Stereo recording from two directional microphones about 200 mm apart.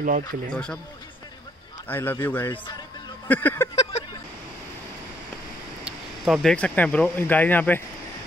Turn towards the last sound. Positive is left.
turn(degrees=10)  # may be behind; listen again after turning